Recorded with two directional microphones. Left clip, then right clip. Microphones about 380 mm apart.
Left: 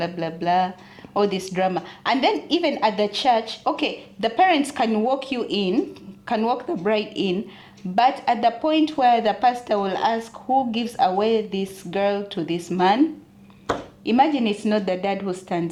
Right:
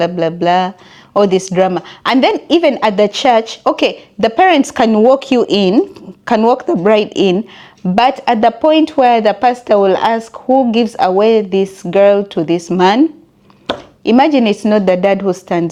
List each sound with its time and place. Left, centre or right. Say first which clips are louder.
0.0 s a woman's voice: right 12 dB; right
14.0 s a woman's voice: right 9 dB; right